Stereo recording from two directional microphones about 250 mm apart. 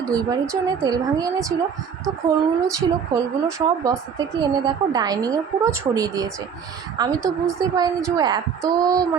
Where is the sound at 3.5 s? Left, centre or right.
Centre.